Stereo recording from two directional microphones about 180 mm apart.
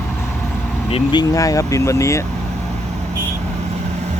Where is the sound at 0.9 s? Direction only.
25° left (ahead or behind).